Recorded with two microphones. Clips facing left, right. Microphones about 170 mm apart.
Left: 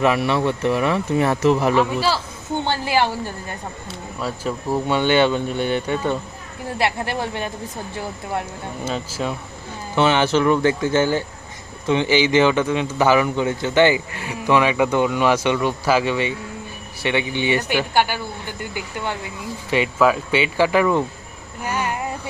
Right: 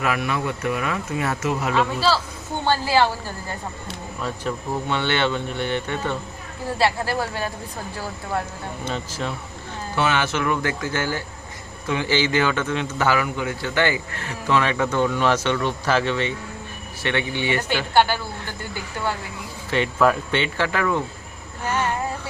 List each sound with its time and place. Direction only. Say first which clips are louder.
0.0 s speech: left 6 dB; 30° left (ahead or behind)
2.6 s a man's voice: right 2 dB; 15° left (ahead or behind)
4.2 s a man's voice: left 2 dB; 10° left (ahead or behind)
8.8 s a man's voice: left 3 dB; 5° left (ahead or behind)
9.9 s a man's voice: left 5 dB; 25° left (ahead or behind)
19.7 s a man's voice: left 2 dB; 5° left (ahead or behind)
21.6 s a sound: even; 10° left (ahead or behind)